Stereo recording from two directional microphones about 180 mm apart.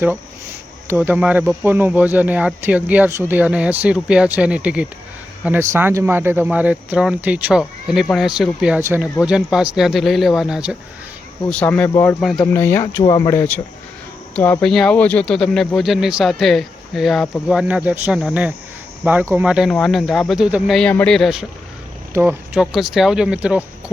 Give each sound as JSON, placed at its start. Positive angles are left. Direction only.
{"t": 0.9, "sound": "speech", "side_deg": -10}
{"t": 11.4, "sound": "speech", "side_deg": 5}
{"t": 13.0, "sound": "speech", "side_deg": 25}
{"t": 14.3, "sound": "speech", "side_deg": 10}
{"t": 22.1, "sound": "speech", "side_deg": -10}
{"t": 22.5, "sound": "speech", "side_deg": 0}